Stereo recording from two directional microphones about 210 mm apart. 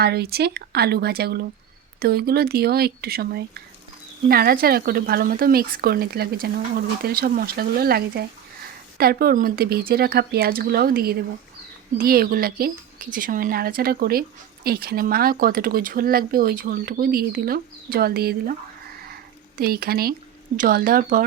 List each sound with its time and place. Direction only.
0.0 s speech: 50° right (ahead or behind)
19.0 s a sound: 45° right (ahead or behind)
20.6 s speech: 40° right (ahead or behind)